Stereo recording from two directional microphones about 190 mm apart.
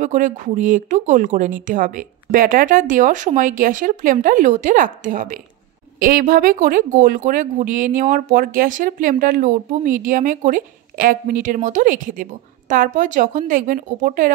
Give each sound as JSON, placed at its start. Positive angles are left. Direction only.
{"t": 0.0, "sound": "speech", "side_deg": -40}